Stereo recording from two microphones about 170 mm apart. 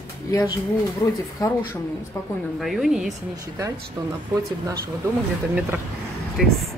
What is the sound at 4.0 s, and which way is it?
Speech, 20° right (ahead or behind).